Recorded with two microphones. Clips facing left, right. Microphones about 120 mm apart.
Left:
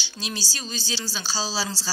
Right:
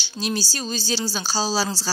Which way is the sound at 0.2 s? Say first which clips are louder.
Right 7 dB; 40° right (ahead or behind).